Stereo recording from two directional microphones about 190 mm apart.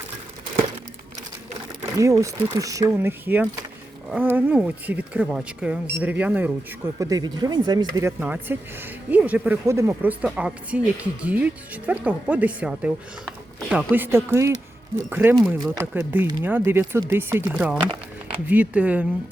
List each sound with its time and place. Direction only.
2.0 s speech: 15° right (ahead or behind)